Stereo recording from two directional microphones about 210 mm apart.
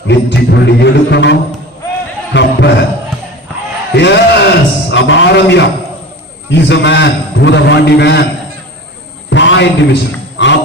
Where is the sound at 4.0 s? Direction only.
55° left (ahead or behind).